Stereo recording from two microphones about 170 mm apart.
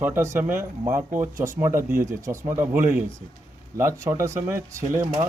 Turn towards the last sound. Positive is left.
turn(degrees=-15)  # may be behind; listen again after turning